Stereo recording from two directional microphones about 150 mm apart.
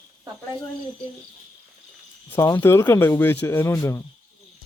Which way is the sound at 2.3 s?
15° left (ahead or behind).